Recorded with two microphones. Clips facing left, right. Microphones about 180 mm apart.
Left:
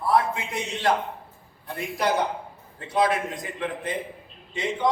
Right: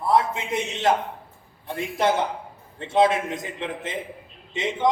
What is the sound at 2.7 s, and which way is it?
A man's voice, 25° right (ahead or behind).